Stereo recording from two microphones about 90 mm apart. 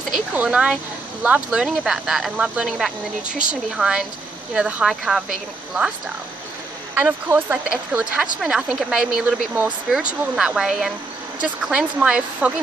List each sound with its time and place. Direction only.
0.3 s speech: 15° right (ahead or behind)
7.2 s speech: 25° right (ahead or behind)
7.6 s speech: 10° right (ahead or behind)
9.8 s speech: 5° right (ahead or behind)